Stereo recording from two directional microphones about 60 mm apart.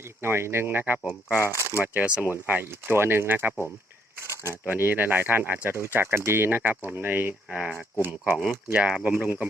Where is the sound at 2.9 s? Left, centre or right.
Right.